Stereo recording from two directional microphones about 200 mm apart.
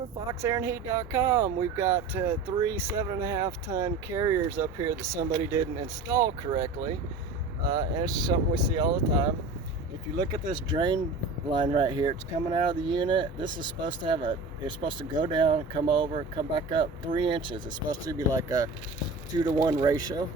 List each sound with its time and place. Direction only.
0.3 s speech: 15° right (ahead or behind)
10.4 s speech: 25° right (ahead or behind)